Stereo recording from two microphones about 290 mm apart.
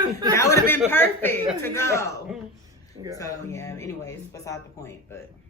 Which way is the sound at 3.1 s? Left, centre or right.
Centre.